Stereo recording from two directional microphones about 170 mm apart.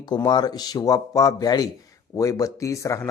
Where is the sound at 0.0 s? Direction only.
25° left (ahead or behind).